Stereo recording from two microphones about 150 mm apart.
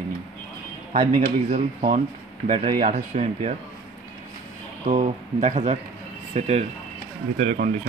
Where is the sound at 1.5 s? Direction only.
60° right (ahead or behind).